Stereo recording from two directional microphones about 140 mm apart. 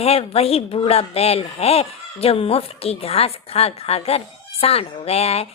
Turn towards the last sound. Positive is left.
turn(degrees=45)  # may be behind; listen again after turning